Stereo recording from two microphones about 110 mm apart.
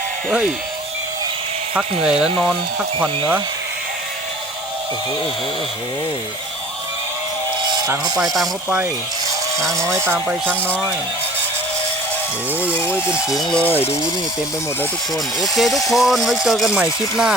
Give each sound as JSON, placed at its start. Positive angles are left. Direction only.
{"t": 1.7, "sound": "speech", "side_deg": -5}
{"t": 8.2, "sound": "speech", "side_deg": 0}
{"t": 9.6, "sound": "speech", "side_deg": -30}
{"t": 12.9, "sound": "speech", "side_deg": -10}
{"t": 15.4, "sound": "speech", "side_deg": 0}